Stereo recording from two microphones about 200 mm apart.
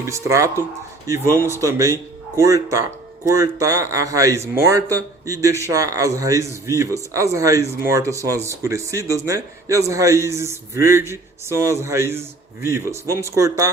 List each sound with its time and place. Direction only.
0.0 s a man's voice: 15° right (ahead or behind)